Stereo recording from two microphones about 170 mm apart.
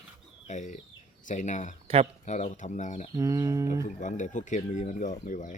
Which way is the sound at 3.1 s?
20° right (ahead or behind).